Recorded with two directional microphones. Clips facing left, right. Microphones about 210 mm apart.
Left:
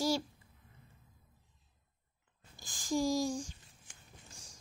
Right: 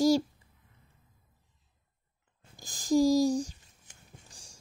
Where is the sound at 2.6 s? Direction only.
40° right (ahead or behind).